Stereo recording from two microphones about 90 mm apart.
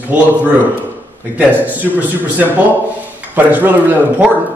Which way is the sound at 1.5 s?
20° right (ahead or behind).